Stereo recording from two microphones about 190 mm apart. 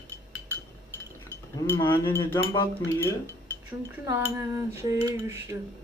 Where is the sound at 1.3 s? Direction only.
15° left (ahead or behind).